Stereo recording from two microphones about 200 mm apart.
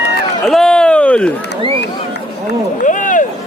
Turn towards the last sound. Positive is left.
turn(degrees=40)  # may be behind; listen again after turning